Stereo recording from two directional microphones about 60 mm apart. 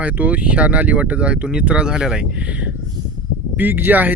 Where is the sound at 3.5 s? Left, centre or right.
Right.